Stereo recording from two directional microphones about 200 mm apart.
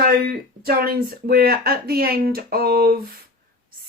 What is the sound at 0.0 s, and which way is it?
Speech, 45° right (ahead or behind).